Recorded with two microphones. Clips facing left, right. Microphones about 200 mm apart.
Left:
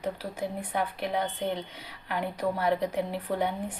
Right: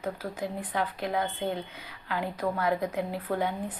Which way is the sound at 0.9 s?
25° left (ahead or behind).